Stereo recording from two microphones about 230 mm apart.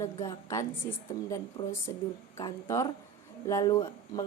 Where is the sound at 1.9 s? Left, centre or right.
Centre.